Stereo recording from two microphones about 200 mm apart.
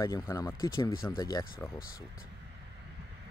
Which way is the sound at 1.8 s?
45° left (ahead or behind).